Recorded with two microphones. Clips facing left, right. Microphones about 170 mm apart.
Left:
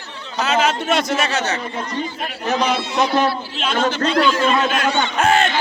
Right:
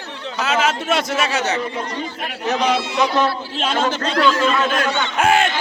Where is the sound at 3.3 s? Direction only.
45° right (ahead or behind).